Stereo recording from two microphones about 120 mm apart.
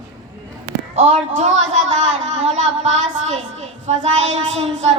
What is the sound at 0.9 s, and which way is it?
A woman's voice, 75° right (ahead or behind).